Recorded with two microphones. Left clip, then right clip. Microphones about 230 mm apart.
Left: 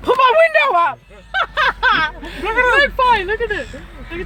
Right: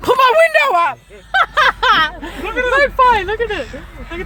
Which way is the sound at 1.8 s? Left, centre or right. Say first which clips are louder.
Right 2 dB; right.